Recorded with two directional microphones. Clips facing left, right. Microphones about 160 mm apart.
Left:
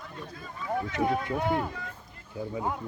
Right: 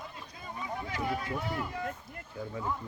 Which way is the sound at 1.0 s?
55° left (ahead or behind).